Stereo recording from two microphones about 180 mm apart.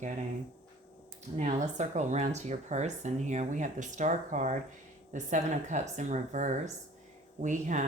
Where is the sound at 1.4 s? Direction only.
45° right (ahead or behind).